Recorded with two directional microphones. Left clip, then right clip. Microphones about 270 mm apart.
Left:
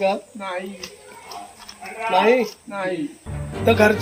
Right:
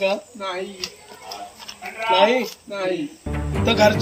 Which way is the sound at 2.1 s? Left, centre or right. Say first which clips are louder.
Even; centre.